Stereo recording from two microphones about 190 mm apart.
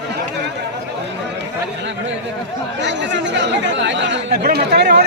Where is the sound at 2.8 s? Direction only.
70° right (ahead or behind).